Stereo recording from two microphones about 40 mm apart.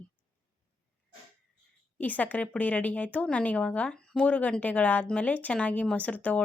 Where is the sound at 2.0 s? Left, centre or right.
Left.